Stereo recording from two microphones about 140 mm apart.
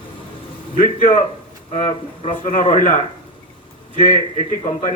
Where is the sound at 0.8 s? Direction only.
75° left (ahead or behind).